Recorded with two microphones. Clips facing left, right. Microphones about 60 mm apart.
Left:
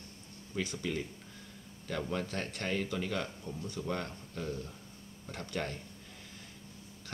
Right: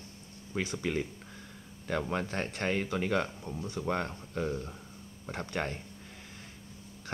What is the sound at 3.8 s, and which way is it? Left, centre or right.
Speech, right.